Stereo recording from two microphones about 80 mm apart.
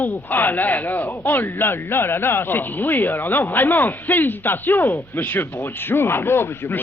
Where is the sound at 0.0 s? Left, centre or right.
Left.